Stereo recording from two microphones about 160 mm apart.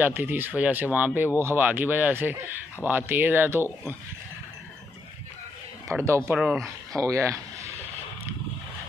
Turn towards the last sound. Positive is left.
turn(degrees=-20)  # may be behind; listen again after turning